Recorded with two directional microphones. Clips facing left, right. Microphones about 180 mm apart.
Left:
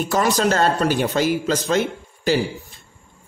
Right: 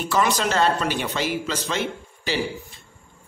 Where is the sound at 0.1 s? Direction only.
40° left (ahead or behind).